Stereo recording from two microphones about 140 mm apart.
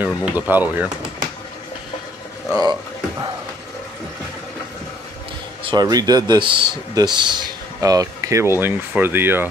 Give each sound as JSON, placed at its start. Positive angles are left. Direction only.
{"t": 0.0, "sound": "speech", "side_deg": -10}
{"t": 2.5, "sound": "speech", "side_deg": -30}
{"t": 5.6, "sound": "speech", "side_deg": -35}